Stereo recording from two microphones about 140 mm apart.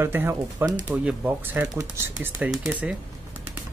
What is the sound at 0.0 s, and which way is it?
Speech, 15° right (ahead or behind).